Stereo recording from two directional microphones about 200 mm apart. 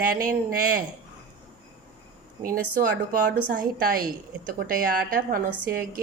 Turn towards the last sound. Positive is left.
turn(degrees=-45)  # may be behind; listen again after turning